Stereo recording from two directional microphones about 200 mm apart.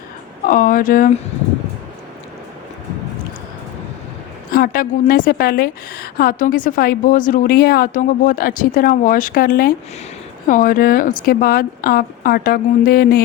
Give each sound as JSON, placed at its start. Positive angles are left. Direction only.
{"t": 0.4, "sound": "a woman's voice", "side_deg": 40}
{"t": 4.5, "sound": "a woman's voice", "side_deg": 45}